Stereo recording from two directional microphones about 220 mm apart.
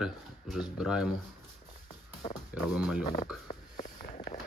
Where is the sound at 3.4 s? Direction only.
40° left (ahead or behind).